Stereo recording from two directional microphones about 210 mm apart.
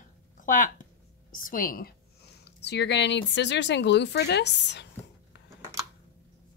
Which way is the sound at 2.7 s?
55° left (ahead or behind).